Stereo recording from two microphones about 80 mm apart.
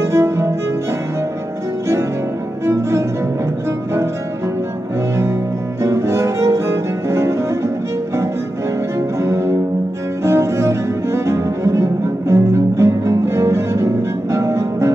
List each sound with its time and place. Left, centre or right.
0.0 s music: right
2.6 s cello: right
5.8 s cello: right
9.2 s music: right
10.2 s cello: right